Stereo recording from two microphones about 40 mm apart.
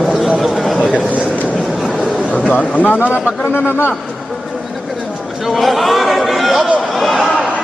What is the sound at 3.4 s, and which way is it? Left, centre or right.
Speech, left.